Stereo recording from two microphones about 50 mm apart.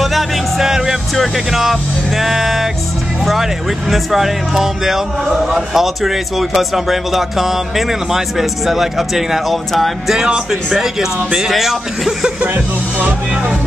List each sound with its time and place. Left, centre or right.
0.0 s music: centre
1.1 s a man's voice: centre
3.9 s a man's voice: centre
10.1 s speech: centre